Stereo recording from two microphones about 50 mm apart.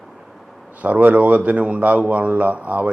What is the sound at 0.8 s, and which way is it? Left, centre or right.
A man's voice, right.